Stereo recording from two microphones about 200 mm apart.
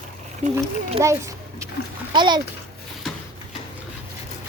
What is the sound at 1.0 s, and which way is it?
A child's voice, 15° right (ahead or behind).